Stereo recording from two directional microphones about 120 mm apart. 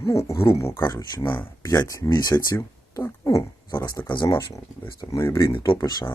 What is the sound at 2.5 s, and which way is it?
Speech, 20° left (ahead or behind).